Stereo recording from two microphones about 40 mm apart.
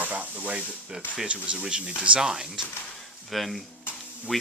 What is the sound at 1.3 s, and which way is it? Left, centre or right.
Speech, right.